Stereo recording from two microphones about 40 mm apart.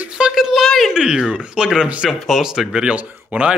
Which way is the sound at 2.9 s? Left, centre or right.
Right.